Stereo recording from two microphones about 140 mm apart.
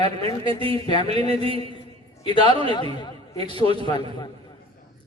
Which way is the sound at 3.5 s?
40° right (ahead or behind).